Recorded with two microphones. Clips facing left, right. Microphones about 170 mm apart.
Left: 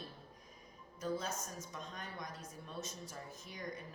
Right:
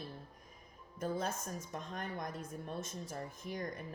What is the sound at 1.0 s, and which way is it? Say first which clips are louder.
A woman's voice: right 2 dB; 55° right (ahead or behind).